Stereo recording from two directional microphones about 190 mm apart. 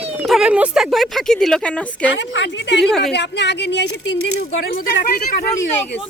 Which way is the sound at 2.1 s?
70° left (ahead or behind).